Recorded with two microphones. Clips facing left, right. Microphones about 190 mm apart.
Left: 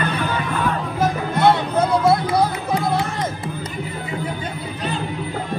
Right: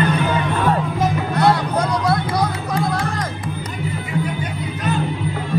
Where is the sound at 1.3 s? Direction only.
25° left (ahead or behind).